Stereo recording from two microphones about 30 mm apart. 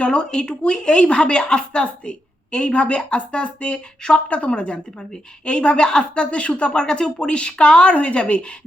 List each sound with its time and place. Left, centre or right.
0.0 s speech: left
4.9 s speech: left